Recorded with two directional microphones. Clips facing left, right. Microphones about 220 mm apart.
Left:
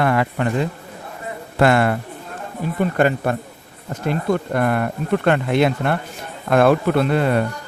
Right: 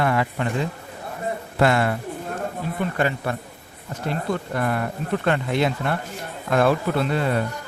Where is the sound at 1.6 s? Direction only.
60° left (ahead or behind).